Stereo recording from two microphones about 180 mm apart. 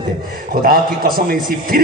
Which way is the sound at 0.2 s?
55° right (ahead or behind).